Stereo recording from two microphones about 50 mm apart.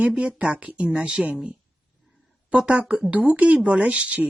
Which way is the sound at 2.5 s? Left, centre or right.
Centre.